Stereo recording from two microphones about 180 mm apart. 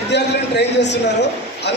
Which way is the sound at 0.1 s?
70° left (ahead or behind).